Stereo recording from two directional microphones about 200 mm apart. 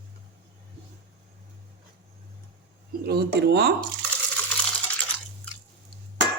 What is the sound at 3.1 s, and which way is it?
Speech, 55° right (ahead or behind).